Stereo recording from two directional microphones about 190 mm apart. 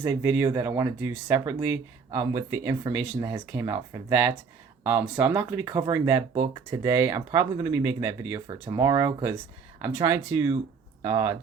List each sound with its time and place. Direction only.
0.0 s speech: 20° right (ahead or behind)